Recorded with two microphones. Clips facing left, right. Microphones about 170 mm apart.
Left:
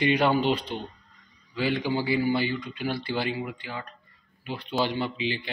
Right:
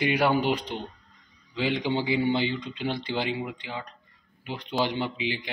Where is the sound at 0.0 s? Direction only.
10° right (ahead or behind).